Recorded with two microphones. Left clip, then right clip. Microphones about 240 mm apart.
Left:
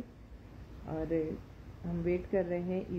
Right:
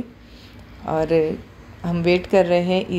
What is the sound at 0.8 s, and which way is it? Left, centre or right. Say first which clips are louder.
Speech: right 16 dB; centre.